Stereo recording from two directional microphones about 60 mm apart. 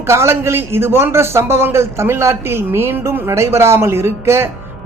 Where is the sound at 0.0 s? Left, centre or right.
Right.